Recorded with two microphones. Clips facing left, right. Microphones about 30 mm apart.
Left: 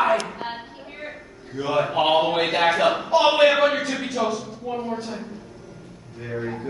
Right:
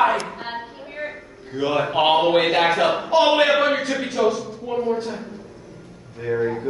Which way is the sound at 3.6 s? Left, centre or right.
Right.